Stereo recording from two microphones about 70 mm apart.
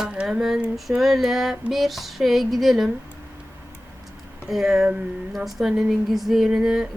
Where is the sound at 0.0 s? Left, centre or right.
Centre.